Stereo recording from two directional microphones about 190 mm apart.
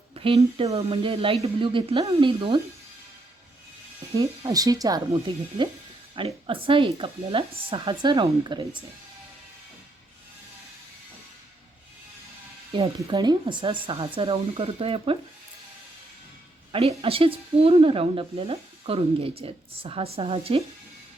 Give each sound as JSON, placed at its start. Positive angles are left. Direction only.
{"t": 0.1, "sound": "a woman's voice", "side_deg": -30}
{"t": 4.1, "sound": "a woman's voice", "side_deg": -20}
{"t": 13.0, "sound": "a woman's voice", "side_deg": -20}
{"t": 17.0, "sound": "a woman's voice", "side_deg": -30}